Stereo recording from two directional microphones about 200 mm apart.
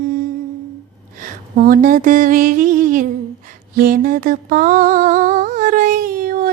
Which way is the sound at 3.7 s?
45° right (ahead or behind).